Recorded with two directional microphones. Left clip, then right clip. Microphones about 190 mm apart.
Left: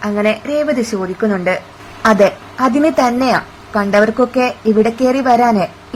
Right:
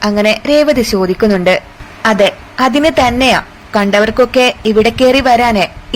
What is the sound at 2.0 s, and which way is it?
Speech, 25° right (ahead or behind).